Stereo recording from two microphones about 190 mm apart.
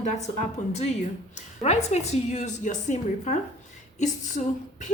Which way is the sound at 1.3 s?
35° left (ahead or behind).